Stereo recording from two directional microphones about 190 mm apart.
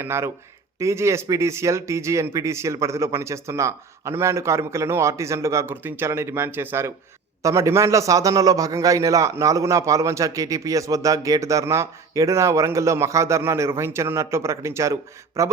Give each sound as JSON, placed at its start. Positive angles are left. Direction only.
{"t": 0.0, "sound": "a man's voice", "side_deg": -15}